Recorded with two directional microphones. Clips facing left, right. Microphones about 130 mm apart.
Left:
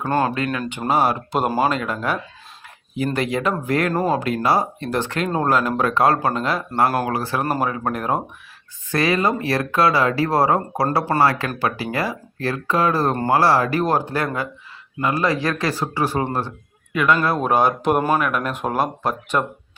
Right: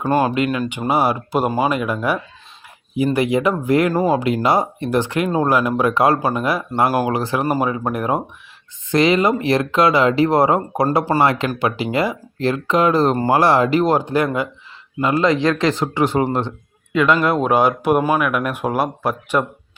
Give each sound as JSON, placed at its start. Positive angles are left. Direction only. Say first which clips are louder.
{"t": 0.0, "sound": "speech", "louder": "right 3 dB", "side_deg": -15}